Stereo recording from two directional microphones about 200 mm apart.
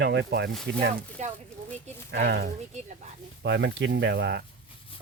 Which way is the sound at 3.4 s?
60° right (ahead or behind).